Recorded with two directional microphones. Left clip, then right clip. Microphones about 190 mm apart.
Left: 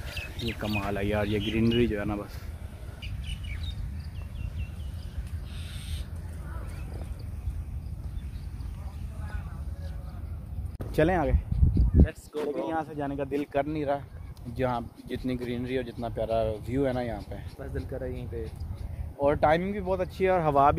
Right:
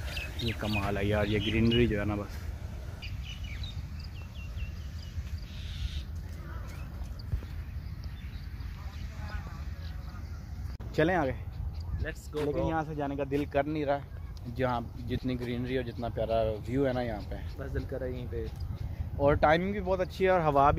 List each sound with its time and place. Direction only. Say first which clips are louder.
0.1 s bird: left 1 dB; 55° left (ahead or behind)
0.7 s speech: left 1 dB; centre (ahead or behind)
11.0 s speech: left 2 dB; 20° left (ahead or behind)
12.0 s speech: left 3 dB; centre (ahead or behind)
12.6 s speech: left 1 dB; 25° left (ahead or behind)
17.6 s speech: even; 5° right (ahead or behind); by 20.7 s 20° left (ahead or behind)